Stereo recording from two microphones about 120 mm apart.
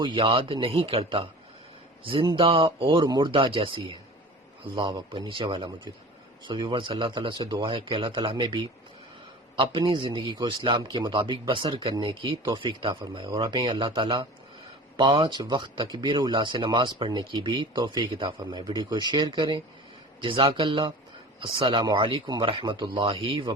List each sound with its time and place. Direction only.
0.0 s a man's voice: 45° right (ahead or behind)